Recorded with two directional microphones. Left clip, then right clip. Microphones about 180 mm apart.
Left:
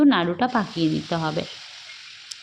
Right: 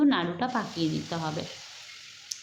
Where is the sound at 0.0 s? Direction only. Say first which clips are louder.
Left 6 dB; 35° left (ahead or behind).